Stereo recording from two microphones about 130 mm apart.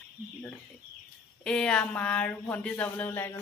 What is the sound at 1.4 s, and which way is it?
Speech, 5° left (ahead or behind).